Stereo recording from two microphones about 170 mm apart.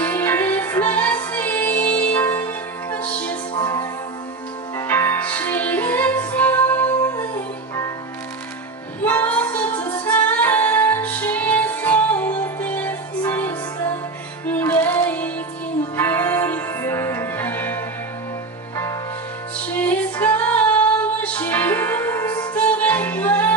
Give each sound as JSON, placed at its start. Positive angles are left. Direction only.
{"t": 0.0, "sound": "music", "side_deg": 10}
{"t": 3.5, "sound": "music", "side_deg": 25}
{"t": 4.7, "sound": "music", "side_deg": 15}
{"t": 9.0, "sound": "music", "side_deg": 10}
{"t": 19.7, "sound": "female singing", "side_deg": 10}
{"t": 22.5, "sound": "music", "side_deg": 10}